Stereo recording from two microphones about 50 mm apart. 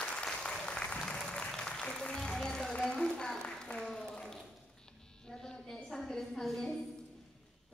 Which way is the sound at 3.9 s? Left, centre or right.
Centre.